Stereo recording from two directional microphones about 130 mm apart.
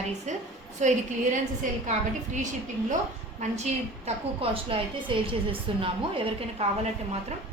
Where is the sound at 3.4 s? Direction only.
60° right (ahead or behind).